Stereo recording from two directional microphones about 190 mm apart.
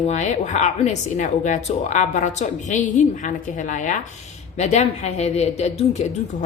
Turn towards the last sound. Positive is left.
turn(degrees=35)  # may be behind; listen again after turning